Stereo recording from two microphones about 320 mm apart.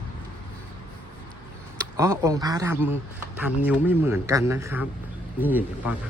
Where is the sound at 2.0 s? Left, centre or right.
Centre.